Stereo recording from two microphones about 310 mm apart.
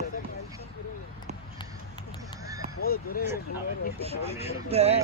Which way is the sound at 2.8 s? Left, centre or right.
Left.